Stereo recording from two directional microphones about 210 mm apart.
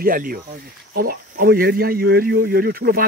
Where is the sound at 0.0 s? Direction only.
45° right (ahead or behind).